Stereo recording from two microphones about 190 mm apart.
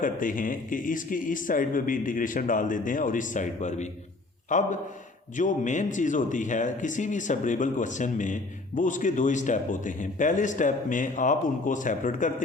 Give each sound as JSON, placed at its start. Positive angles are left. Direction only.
{"t": 0.0, "sound": "a man's voice", "side_deg": 45}